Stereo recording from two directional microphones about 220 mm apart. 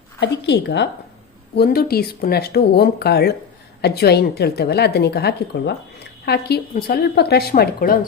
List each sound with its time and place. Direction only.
0.2 s a woman's voice: 50° left (ahead or behind)